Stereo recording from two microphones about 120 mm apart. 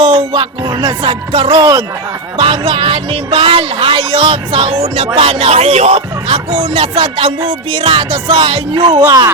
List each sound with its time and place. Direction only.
0.0 s music: 40° right (ahead or behind)
2.4 s speech: 50° right (ahead or behind)
8.3 s music: 45° right (ahead or behind); by 9.3 s 30° right (ahead or behind)